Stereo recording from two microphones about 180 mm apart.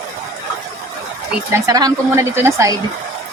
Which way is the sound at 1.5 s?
20° right (ahead or behind).